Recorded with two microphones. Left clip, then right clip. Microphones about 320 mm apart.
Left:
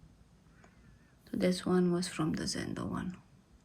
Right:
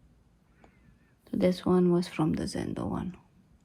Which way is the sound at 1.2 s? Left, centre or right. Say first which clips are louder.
Right 5 dB; centre.